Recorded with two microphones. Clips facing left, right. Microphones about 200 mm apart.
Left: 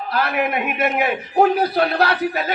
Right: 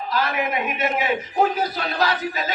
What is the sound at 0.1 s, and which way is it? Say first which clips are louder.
A man's voice: left 3 dB; 60° left (ahead or behind).